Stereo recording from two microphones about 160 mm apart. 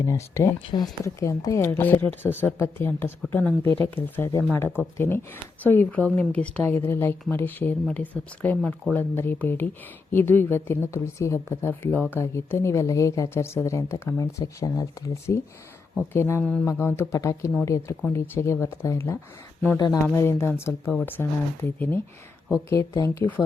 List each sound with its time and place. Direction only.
0.0 s speech: 15° left (ahead or behind)